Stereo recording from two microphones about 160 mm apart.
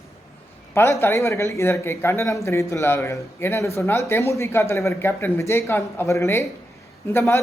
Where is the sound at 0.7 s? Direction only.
15° left (ahead or behind).